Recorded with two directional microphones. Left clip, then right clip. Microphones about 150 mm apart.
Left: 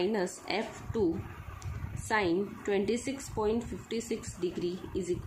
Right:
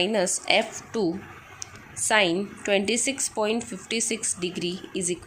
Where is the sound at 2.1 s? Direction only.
25° right (ahead or behind).